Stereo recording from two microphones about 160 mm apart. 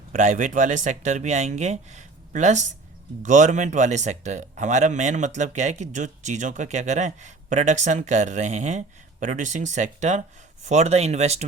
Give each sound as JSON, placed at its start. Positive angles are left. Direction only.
{"t": 0.1, "sound": "speech", "side_deg": -55}